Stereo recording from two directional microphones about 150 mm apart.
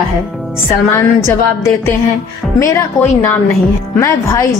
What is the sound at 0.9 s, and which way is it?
A woman's voice, 20° left (ahead or behind).